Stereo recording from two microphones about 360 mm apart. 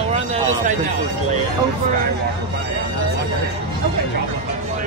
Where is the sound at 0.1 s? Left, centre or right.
Centre.